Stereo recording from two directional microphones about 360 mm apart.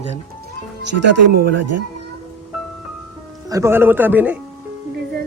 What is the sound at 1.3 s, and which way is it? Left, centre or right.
Speech, right.